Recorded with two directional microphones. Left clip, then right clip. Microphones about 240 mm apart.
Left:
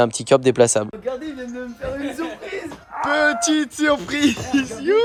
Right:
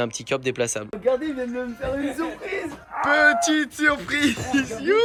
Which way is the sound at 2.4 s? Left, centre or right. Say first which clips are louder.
Right 1 dB; centre.